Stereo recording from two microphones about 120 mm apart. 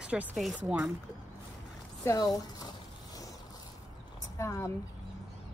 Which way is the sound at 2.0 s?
30° left (ahead or behind).